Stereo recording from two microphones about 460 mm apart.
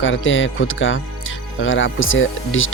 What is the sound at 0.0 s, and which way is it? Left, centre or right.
Speech, left.